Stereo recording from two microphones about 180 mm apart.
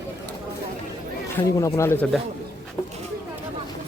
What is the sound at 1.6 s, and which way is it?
Speech, 15° left (ahead or behind).